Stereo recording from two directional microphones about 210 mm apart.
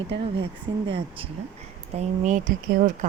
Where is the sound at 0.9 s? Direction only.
25° right (ahead or behind).